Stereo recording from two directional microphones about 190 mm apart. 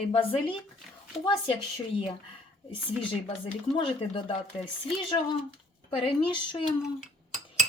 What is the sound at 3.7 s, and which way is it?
Speech, 25° left (ahead or behind).